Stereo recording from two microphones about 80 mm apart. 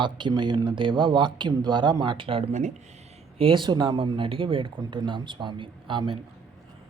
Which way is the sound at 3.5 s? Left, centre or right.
Right.